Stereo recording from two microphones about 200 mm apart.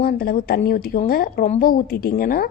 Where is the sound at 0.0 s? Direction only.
50° left (ahead or behind).